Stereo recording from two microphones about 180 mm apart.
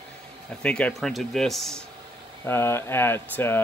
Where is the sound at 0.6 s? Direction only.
5° left (ahead or behind).